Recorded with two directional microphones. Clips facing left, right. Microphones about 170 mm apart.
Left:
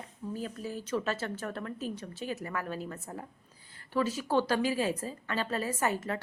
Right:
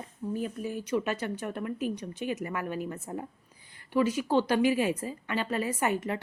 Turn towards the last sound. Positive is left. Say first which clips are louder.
# right 2 dB
turn(degrees=-15)  # may be behind; listen again after turning